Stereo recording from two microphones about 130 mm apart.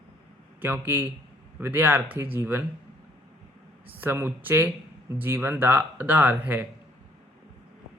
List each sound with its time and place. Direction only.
0.6 s speech: 15° right (ahead or behind)
3.9 s speech: 15° right (ahead or behind)